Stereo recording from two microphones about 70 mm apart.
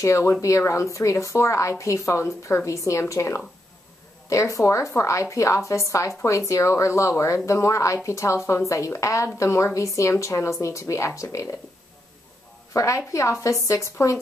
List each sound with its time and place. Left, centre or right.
0.0 s speech: left
12.7 s speech: left